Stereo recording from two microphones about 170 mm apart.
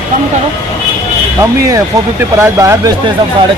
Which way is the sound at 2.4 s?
20° right (ahead or behind).